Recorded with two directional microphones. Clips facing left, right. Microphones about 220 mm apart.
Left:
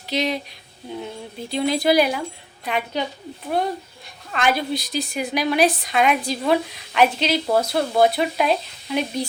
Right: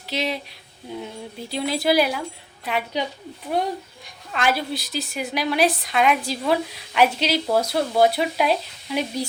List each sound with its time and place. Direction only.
0.1 s a woman's voice: 5° right (ahead or behind)
1.5 s a woman's voice: 5° right (ahead or behind)
4.3 s a woman's voice: 5° right (ahead or behind)